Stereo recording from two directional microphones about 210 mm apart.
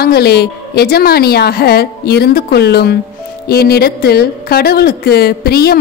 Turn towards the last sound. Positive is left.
turn(degrees=50)  # may be behind; listen again after turning